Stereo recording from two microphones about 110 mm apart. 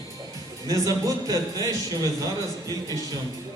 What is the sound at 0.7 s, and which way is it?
Speech, 30° right (ahead or behind).